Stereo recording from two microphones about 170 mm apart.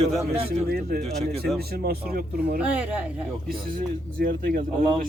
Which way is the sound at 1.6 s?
65° right (ahead or behind).